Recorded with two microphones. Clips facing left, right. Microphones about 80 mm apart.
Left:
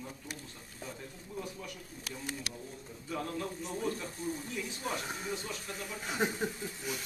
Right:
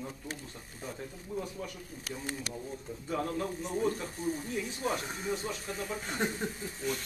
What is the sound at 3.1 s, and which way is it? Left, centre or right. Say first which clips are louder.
Speech: right 4 dB; right.